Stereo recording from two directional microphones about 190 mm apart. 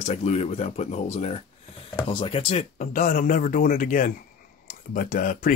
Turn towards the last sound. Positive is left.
turn(degrees=45)  # may be behind; listen again after turning